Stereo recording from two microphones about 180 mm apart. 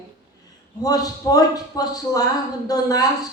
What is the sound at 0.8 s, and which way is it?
Speech, 20° left (ahead or behind).